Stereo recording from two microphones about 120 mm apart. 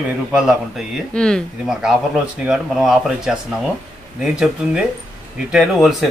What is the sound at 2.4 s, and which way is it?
Speech, 5° right (ahead or behind).